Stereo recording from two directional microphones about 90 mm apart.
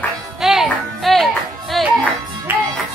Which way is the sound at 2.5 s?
25° right (ahead or behind).